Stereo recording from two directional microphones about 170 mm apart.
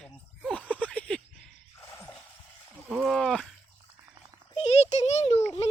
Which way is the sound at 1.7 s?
15° left (ahead or behind).